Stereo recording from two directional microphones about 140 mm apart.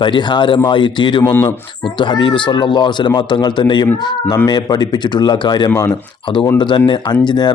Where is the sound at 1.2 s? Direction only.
15° left (ahead or behind).